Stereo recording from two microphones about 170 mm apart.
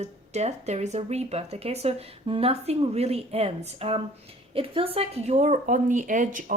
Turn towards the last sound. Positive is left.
turn(degrees=-50)  # may be behind; listen again after turning